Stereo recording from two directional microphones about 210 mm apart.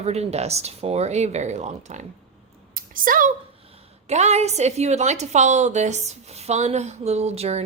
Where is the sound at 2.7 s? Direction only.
40° right (ahead or behind).